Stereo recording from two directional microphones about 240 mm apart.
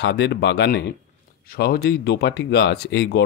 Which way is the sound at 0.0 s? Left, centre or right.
Left.